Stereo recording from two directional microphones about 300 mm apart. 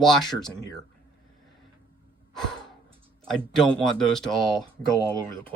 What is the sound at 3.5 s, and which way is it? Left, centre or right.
Speech, centre.